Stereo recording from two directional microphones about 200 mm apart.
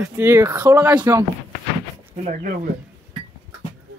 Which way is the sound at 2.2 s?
40° right (ahead or behind).